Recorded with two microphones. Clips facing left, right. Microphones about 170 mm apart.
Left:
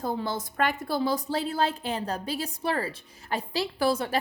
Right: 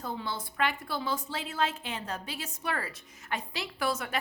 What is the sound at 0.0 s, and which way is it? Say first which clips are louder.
A woman's voice: left 6 dB; 40° left (ahead or behind).